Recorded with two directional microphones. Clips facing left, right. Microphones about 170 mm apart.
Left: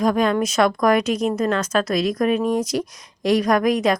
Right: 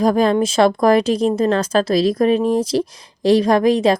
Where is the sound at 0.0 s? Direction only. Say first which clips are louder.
Right 4 dB; 35° right (ahead or behind).